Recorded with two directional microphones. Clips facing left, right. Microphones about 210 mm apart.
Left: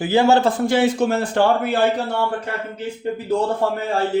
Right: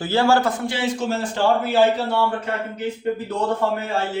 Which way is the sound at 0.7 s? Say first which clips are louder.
Left 6 dB; 55° left (ahead or behind).